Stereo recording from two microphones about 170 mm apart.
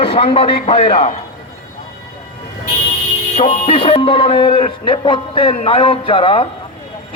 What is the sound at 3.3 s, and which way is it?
A man's voice, 40° left (ahead or behind).